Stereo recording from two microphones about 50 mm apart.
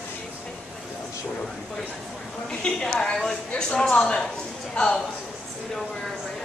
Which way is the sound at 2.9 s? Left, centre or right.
Centre.